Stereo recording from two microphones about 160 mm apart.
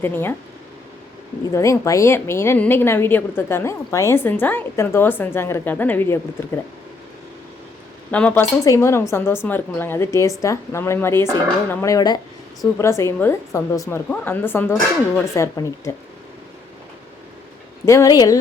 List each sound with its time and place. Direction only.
0.0 s a woman's voice: 15° left (ahead or behind)
1.5 s a woman's voice: 20° left (ahead or behind)
8.1 s a woman's voice: 10° left (ahead or behind)
17.8 s speech: 20° left (ahead or behind)